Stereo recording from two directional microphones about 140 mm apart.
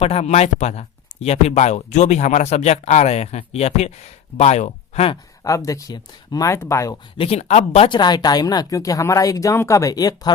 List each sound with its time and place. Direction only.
0.0 s speech: 50° left (ahead or behind)
5.4 s speech: 20° left (ahead or behind)
7.2 s speech: 45° left (ahead or behind)
7.9 s speech: 30° left (ahead or behind)